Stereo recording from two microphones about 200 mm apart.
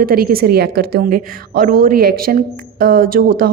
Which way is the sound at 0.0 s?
50° right (ahead or behind).